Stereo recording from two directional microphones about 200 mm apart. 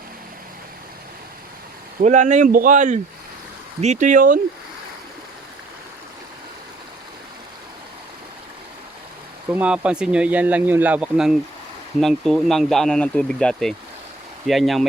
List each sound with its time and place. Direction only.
2.0 s speech: 35° right (ahead or behind)
9.5 s speech: 5° right (ahead or behind)